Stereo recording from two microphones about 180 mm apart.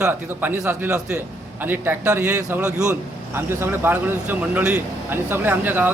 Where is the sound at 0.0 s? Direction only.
10° right (ahead or behind).